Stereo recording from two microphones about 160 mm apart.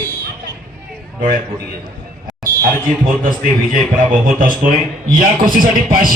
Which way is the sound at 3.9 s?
55° right (ahead or behind).